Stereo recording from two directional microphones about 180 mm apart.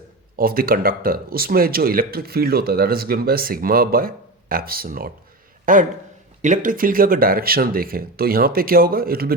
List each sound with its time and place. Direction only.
0.3 s speech: 55° right (ahead or behind)